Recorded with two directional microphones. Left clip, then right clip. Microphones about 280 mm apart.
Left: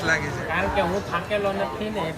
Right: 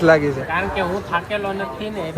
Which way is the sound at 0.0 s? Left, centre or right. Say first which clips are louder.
Right 9 dB; centre.